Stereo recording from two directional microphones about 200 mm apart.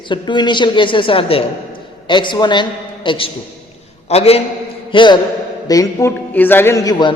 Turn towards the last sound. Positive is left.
turn(degrees=15)  # may be behind; listen again after turning